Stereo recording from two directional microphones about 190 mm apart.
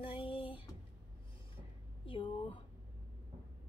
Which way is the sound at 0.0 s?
25° left (ahead or behind).